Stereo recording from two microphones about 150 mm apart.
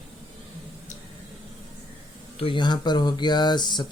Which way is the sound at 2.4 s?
35° left (ahead or behind).